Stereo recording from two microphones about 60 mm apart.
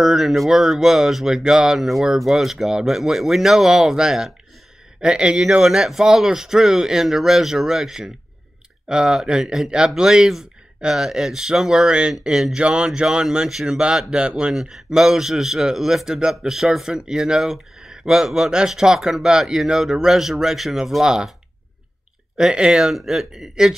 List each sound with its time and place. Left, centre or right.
0.0 s a man's voice: centre
14.5 s a man's voice: centre
22.4 s a man's voice: centre